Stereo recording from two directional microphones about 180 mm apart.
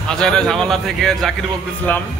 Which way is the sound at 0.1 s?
5° left (ahead or behind).